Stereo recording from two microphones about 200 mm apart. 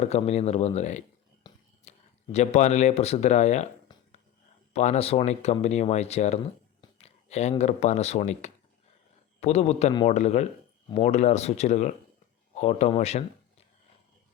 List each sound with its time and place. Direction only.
0.0 s speech: 30° left (ahead or behind)
4.7 s speech: 35° left (ahead or behind)